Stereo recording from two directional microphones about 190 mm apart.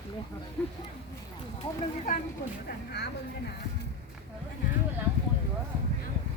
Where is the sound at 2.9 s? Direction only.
60° left (ahead or behind).